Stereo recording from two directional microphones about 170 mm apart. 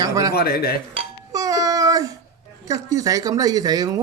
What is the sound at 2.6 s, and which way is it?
Speech, 20° right (ahead or behind).